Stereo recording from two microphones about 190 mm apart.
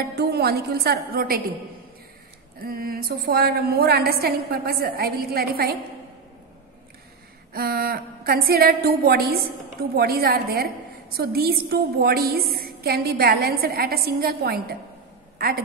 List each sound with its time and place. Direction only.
0.1 s a woman's voice: 60° right (ahead or behind)
2.6 s a woman's voice: 50° right (ahead or behind)
7.5 s a woman's voice: 55° right (ahead or behind)
15.3 s a sound: 55° right (ahead or behind)